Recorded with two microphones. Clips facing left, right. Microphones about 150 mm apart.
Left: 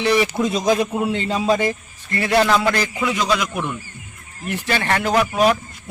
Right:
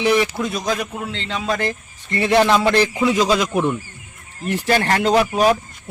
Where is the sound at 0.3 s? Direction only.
20° left (ahead or behind).